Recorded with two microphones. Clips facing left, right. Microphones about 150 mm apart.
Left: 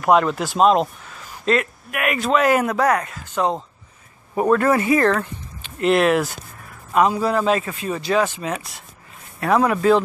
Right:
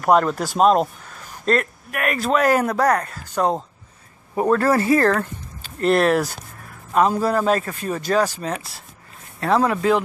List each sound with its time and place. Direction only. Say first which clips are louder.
0.1 s speech: even; 40° right (ahead or behind)